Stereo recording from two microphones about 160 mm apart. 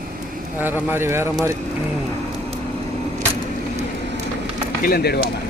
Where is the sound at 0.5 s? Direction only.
10° right (ahead or behind).